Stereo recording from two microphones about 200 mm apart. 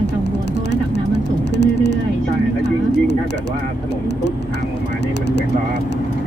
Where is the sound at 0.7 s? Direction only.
60° left (ahead or behind).